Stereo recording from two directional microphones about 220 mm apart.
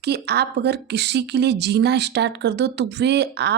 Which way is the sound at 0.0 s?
45° right (ahead or behind).